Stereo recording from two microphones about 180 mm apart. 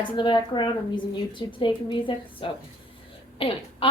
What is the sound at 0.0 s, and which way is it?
A woman's voice, 25° left (ahead or behind).